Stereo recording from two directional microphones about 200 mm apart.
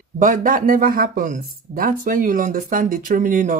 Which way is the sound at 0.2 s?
40° right (ahead or behind).